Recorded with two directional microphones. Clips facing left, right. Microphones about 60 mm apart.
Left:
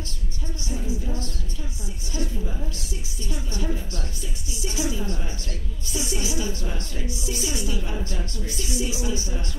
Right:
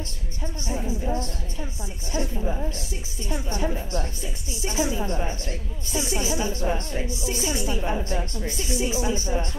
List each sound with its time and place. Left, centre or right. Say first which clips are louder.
0.7 s a woman's voice: right 3 dB; right